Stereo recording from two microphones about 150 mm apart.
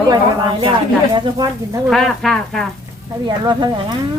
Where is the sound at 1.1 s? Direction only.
25° right (ahead or behind).